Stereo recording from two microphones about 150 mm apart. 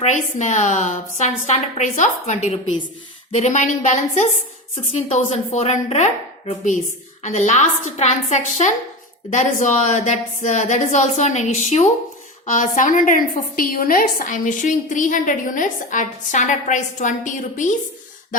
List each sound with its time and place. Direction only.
0.0 s a woman's voice: 50° left (ahead or behind)